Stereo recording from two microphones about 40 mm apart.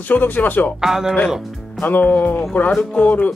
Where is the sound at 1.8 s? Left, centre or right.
Left.